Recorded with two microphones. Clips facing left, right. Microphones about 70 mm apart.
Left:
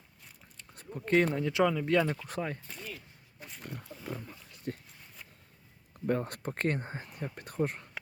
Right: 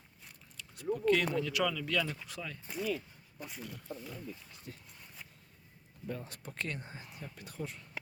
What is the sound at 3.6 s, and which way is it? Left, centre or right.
Wild animals, left.